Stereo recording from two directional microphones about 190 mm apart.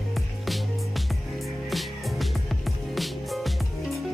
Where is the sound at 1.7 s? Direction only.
Centre (ahead or behind).